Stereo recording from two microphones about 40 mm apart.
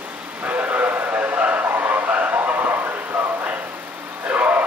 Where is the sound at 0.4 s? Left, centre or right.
Right.